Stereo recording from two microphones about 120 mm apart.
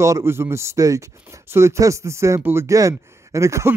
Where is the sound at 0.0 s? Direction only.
25° right (ahead or behind).